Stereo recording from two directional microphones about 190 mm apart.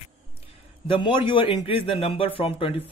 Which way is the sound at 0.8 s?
25° left (ahead or behind).